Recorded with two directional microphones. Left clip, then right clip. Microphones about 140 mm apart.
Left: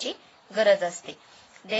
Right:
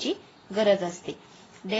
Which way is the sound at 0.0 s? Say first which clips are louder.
Right 3 dB; 40° left (ahead or behind).